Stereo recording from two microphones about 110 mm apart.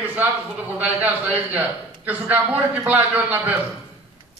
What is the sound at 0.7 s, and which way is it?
A man's voice, 15° right (ahead or behind).